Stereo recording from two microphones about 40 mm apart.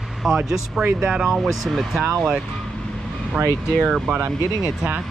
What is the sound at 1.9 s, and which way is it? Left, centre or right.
Speech, right.